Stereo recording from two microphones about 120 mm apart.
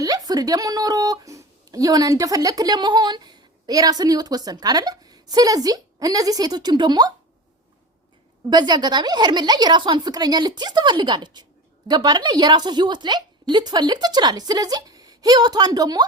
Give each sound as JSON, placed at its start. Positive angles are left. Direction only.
{"t": 0.0, "sound": "a woman's voice", "side_deg": -30}
{"t": 8.4, "sound": "a woman's voice", "side_deg": -35}